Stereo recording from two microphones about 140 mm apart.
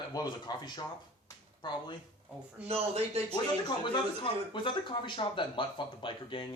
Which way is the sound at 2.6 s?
45° right (ahead or behind).